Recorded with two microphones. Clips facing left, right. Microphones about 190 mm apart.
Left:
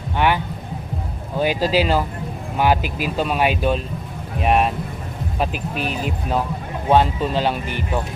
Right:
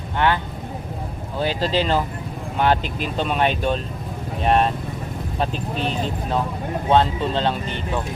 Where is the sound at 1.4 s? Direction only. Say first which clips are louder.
Left 3 dB; 10° left (ahead or behind).